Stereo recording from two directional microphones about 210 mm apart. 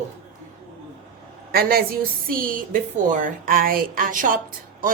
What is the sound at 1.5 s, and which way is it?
A woman's voice, 45° right (ahead or behind).